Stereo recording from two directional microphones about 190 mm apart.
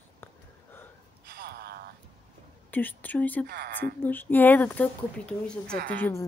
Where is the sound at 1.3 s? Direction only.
55° right (ahead or behind).